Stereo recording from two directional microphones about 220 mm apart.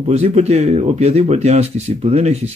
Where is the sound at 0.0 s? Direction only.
30° right (ahead or behind).